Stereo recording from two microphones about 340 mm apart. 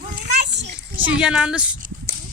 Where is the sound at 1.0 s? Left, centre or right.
Centre.